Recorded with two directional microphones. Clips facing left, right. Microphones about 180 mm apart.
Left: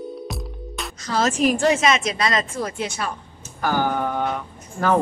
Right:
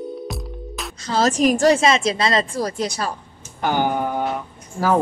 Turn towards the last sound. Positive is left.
turn(degrees=-5)  # may be behind; listen again after turning